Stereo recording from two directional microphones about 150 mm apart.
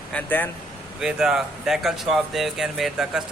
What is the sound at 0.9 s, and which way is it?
Speech, 5° right (ahead or behind).